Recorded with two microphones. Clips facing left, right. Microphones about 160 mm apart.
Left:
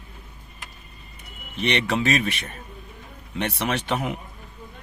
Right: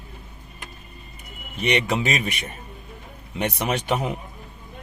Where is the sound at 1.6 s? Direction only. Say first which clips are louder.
Right 1 dB; 10° right (ahead or behind).